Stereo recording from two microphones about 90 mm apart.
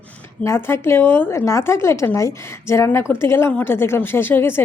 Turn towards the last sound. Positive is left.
turn(degrees=25)  # may be behind; listen again after turning